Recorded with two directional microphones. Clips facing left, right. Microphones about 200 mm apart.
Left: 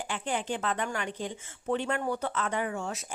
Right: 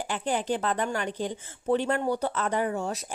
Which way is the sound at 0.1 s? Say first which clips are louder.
Right 4 dB; 35° right (ahead or behind).